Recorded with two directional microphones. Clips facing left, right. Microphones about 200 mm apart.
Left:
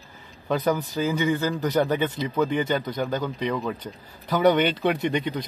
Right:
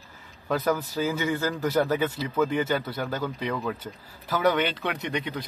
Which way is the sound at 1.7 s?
Centre (ahead or behind).